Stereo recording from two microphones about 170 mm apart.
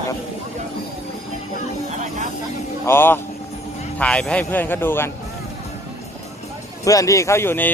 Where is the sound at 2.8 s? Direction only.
15° left (ahead or behind).